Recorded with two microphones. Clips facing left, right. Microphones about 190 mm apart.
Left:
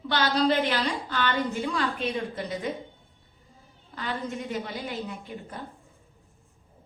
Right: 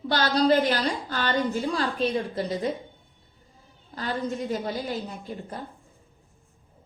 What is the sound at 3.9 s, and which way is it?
A woman's voice, 35° right (ahead or behind).